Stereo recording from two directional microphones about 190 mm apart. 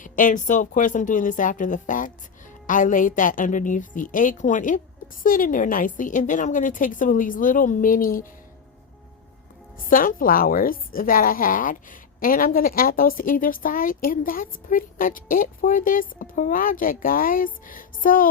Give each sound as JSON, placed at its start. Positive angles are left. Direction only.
{"t": 0.0, "sound": "a woman's voice", "side_deg": 45}
{"t": 9.9, "sound": "a woman's voice", "side_deg": 45}